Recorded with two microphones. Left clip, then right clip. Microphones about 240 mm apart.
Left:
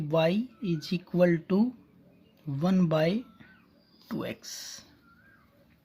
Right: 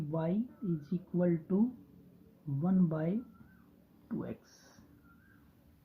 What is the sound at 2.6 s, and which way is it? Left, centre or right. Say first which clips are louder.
Speech: left 9 dB; left.